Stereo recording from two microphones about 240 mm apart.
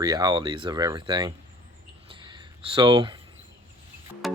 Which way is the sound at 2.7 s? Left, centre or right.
Centre.